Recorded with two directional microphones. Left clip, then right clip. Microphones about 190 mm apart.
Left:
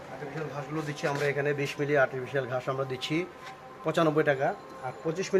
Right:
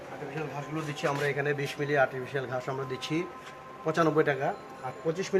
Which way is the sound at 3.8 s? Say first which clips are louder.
Even; 55° left (ahead or behind).